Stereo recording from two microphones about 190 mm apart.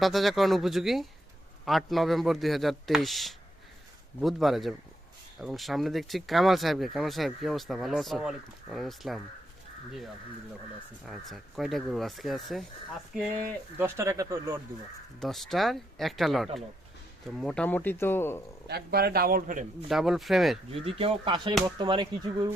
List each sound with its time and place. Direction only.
0.0 s speech: centre (ahead or behind)
11.0 s speech: centre (ahead or behind)
13.7 s speech: 15° right (ahead or behind)
15.2 s speech: centre (ahead or behind)
18.7 s speech: 55° right (ahead or behind)
19.9 s speech: centre (ahead or behind)
20.8 s speech: 30° right (ahead or behind)